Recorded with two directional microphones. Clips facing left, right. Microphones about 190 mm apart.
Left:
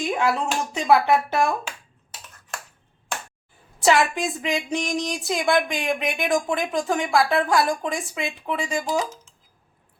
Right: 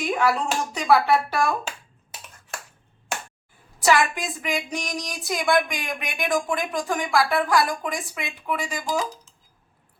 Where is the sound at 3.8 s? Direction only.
25° left (ahead or behind).